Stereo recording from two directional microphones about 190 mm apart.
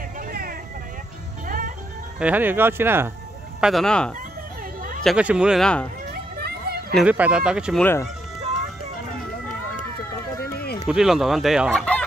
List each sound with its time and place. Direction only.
0.3 s vehicle: 50° right (ahead or behind)
2.1 s speech: 10° right (ahead or behind)
3.6 s fowl: centre (ahead or behind)
6.3 s children playing: 55° right (ahead or behind)
7.0 s fowl: 5° right (ahead or behind)
7.8 s speech: 10° left (ahead or behind)
10.4 s music: 55° left (ahead or behind)
10.9 s fowl: centre (ahead or behind)